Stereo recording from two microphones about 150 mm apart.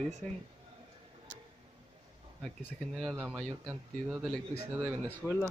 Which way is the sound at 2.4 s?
Centre (ahead or behind).